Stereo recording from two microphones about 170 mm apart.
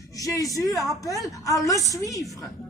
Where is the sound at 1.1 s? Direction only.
20° left (ahead or behind).